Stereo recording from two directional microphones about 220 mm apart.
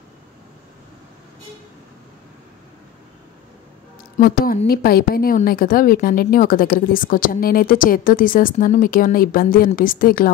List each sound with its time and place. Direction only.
4.2 s a woman's voice: 40° left (ahead or behind)